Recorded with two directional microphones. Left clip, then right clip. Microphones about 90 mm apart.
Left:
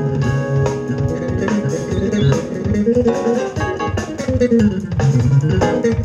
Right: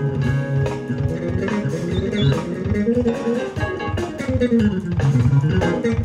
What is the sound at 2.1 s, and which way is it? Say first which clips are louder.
Music: left 4 dB; 25° left (ahead or behind).